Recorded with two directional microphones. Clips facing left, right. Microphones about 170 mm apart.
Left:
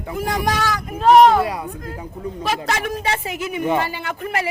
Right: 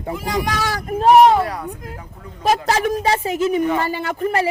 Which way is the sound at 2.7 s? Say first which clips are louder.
Right 5 dB; 35° right (ahead or behind).